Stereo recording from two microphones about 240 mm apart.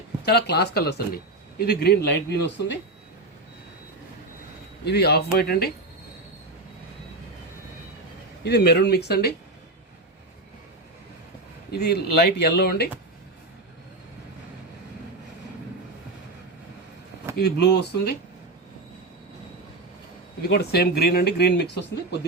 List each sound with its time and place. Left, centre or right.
0.3 s speech: left
4.9 s speech: left
8.4 s speech: left
11.7 s speech: left
17.3 s speech: left
20.5 s speech: left